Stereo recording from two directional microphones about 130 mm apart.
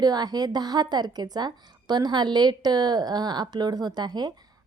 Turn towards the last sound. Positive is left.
turn(degrees=-30)  # may be behind; listen again after turning